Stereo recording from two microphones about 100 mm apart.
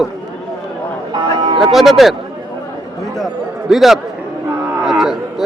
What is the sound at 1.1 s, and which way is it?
Music, 50° right (ahead or behind).